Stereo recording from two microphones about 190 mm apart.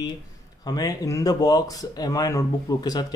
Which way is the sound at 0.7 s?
20° left (ahead or behind).